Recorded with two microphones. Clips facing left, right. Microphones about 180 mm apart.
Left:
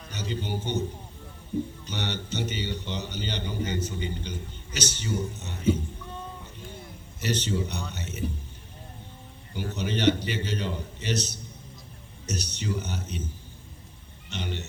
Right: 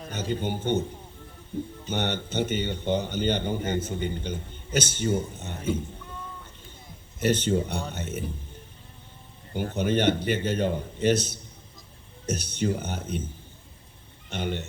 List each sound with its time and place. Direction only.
0.1 s a man's voice: 55° right (ahead or behind)
1.9 s a man's voice: 50° right (ahead or behind)
7.2 s a man's voice: 55° right (ahead or behind)
9.5 s a man's voice: 50° right (ahead or behind)
14.3 s a man's voice: 50° right (ahead or behind)